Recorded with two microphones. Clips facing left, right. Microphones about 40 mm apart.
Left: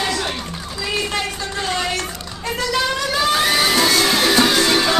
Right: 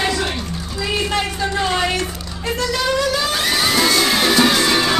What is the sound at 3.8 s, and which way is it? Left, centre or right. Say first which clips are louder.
Music: even; centre.